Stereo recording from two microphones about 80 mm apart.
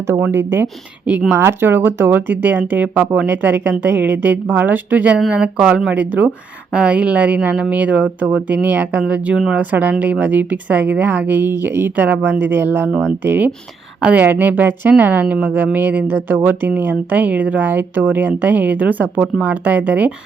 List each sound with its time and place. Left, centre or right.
0.1 s speech: right